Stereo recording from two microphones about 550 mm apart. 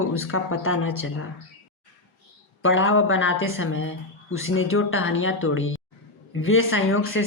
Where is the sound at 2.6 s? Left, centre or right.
Left.